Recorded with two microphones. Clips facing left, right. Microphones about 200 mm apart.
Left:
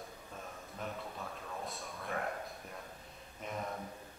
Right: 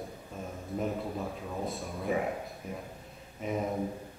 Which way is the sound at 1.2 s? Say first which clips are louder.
Right 7 dB; 20° right (ahead or behind).